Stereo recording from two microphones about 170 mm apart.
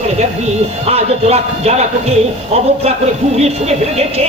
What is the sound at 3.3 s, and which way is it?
Speech, 40° right (ahead or behind).